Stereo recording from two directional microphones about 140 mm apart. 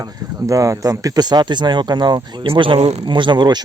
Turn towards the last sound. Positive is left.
turn(degrees=-30)  # may be behind; listen again after turning